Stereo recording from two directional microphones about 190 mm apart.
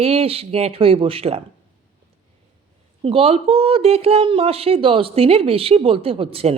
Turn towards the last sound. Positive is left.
turn(degrees=-30)  # may be behind; listen again after turning